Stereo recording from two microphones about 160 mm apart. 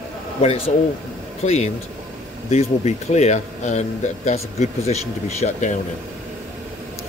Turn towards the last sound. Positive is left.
turn(degrees=45)  # may be behind; listen again after turning